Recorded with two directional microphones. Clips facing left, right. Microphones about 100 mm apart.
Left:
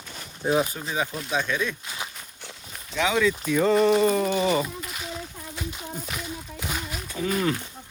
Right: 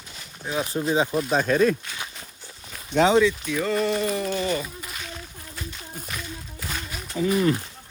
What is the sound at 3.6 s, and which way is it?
Speech, 10° left (ahead or behind).